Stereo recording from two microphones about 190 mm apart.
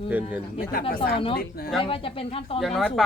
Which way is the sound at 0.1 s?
10° right (ahead or behind).